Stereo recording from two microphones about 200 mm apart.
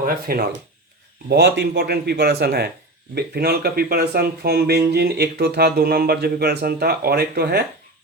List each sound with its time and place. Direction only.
0.3 s speech: 50° right (ahead or behind)